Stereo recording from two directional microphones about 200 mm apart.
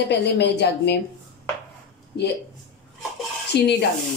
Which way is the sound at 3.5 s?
55° left (ahead or behind).